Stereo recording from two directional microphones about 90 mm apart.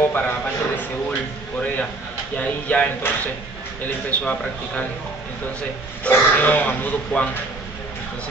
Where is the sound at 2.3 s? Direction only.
15° left (ahead or behind).